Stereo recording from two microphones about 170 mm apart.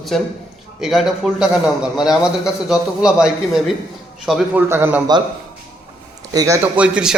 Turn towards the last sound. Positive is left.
turn(degrees=-5)  # may be behind; listen again after turning